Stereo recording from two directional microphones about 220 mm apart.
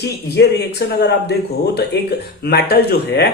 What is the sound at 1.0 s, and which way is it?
Speech, 45° left (ahead or behind).